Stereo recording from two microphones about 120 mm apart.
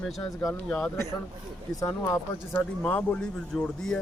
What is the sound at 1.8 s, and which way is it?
Speech, 25° left (ahead or behind).